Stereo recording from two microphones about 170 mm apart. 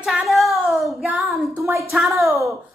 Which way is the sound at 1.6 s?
15° right (ahead or behind).